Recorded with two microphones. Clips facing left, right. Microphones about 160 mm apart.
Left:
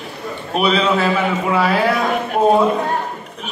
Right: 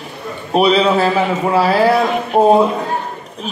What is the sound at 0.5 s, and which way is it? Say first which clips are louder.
Speech: right 4 dB; 35° right (ahead or behind).